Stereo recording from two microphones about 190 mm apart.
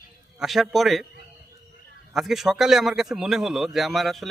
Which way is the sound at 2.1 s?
Centre (ahead or behind).